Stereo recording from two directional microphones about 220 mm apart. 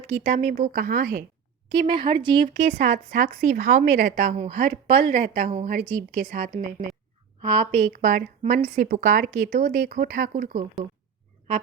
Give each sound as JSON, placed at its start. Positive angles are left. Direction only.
{"t": 0.1, "sound": "a woman's voice", "side_deg": -30}
{"t": 1.7, "sound": "a woman's voice", "side_deg": -20}
{"t": 7.4, "sound": "speech", "side_deg": -20}
{"t": 7.8, "sound": "a woman's voice", "side_deg": -35}